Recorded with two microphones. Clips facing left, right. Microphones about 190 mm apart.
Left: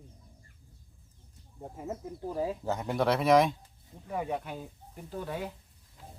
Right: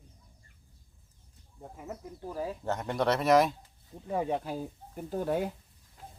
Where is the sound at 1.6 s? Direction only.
25° left (ahead or behind).